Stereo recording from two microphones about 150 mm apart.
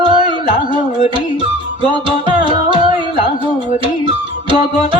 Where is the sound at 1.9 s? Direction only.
30° right (ahead or behind).